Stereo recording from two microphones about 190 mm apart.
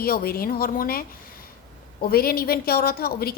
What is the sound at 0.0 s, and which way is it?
A woman's voice, 50° left (ahead or behind).